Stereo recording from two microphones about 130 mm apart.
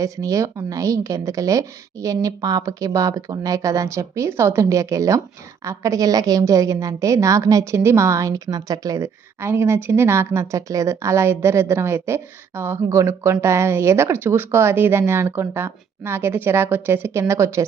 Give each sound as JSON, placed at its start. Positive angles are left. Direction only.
{"t": 0.0, "sound": "a woman's voice", "side_deg": -25}